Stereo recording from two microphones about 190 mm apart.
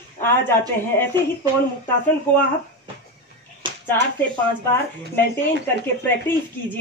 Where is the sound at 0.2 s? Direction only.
10° left (ahead or behind).